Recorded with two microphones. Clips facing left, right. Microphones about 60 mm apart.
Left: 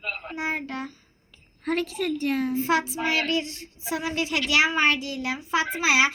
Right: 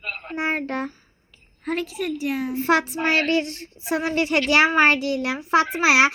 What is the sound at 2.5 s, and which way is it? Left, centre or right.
Child singing, right.